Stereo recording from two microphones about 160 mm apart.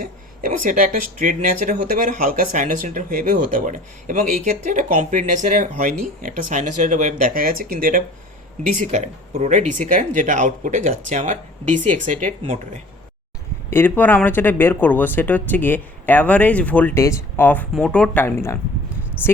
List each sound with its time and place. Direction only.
0.0 s speech: 60° right (ahead or behind)
8.6 s speech: 50° right (ahead or behind)
13.7 s speech: 15° left (ahead or behind)